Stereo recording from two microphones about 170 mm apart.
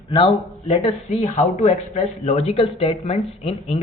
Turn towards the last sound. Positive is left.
turn(degrees=40)  # may be behind; listen again after turning